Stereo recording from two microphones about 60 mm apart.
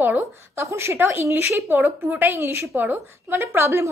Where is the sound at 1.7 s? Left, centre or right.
Right.